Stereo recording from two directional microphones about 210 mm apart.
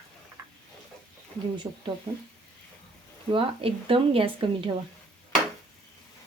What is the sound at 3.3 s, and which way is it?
A woman's voice, 25° right (ahead or behind).